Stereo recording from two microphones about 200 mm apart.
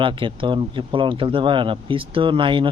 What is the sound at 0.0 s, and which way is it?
Speech, 25° right (ahead or behind).